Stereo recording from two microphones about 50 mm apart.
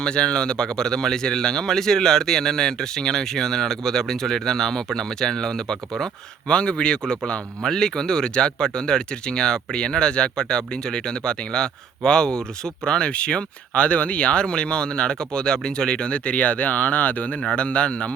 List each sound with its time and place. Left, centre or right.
0.0 s speech: centre